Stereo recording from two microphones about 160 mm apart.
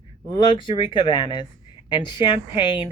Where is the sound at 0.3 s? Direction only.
30° left (ahead or behind).